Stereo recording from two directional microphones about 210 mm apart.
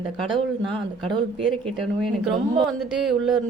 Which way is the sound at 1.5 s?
Centre (ahead or behind).